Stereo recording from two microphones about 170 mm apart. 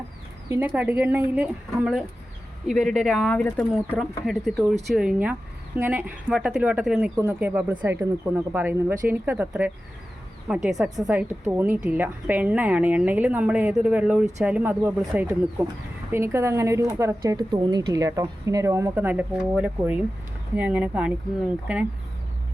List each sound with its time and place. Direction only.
0.5 s speech: 10° right (ahead or behind)